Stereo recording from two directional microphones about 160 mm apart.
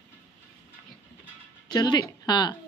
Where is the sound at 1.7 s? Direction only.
25° left (ahead or behind).